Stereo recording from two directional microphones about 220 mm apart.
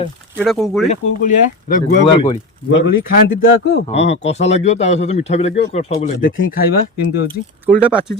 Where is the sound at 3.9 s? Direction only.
30° left (ahead or behind).